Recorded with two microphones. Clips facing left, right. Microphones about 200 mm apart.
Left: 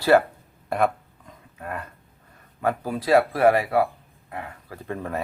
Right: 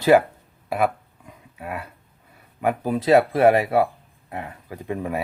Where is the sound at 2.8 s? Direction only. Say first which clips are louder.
Right 3 dB; 20° right (ahead or behind).